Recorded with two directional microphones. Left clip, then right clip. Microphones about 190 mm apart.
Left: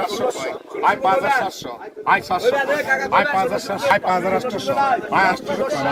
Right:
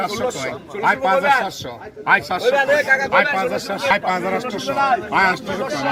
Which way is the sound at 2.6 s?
55° left (ahead or behind).